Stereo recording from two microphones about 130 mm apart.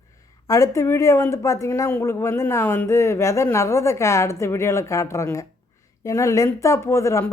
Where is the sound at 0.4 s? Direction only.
25° left (ahead or behind).